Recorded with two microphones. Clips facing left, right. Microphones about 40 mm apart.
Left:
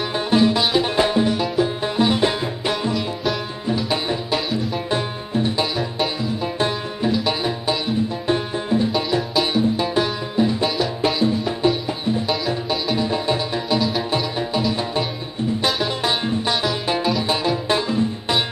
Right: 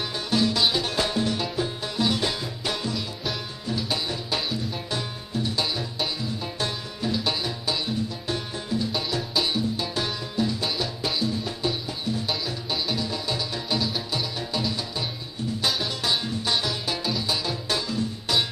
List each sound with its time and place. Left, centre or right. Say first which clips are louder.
0.3 s music: left 6 dB; left
4.9 s music: left 8 dB; left
7.1 s music: left 6 dB; centre
8.3 s music: left 9 dB; left
9.3 s music: left 3 dB; centre
9.6 s music: left 8 dB; left
13.7 s music: left 7 dB; centre
16.0 s music: left 6 dB; left